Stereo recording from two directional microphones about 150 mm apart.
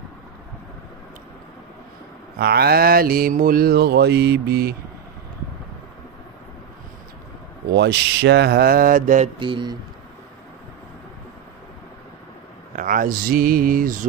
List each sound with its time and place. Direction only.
2.3 s mantra: 90° right
7.7 s speech: 90° right; by 9.3 s 60° right (ahead or behind)
9.4 s speech: 30° right (ahead or behind)
12.7 s speech: 65° right (ahead or behind)